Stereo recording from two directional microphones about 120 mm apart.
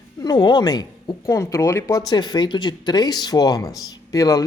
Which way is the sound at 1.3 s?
25° left (ahead or behind).